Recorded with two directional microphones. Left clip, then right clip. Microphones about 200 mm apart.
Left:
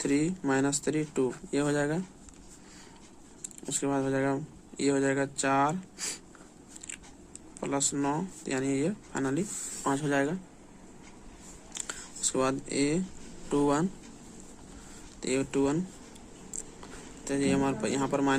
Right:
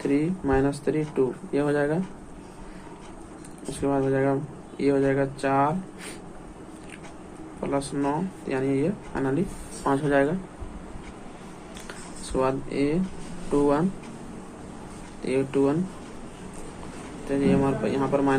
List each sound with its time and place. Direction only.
0.0 s speech: 55° left (ahead or behind)
3.8 s speech: 55° left (ahead or behind)
7.6 s speech: 55° left (ahead or behind)
12.3 s speech: 60° left (ahead or behind)
15.2 s speech: 55° left (ahead or behind)
17.2 s speech: 55° left (ahead or behind)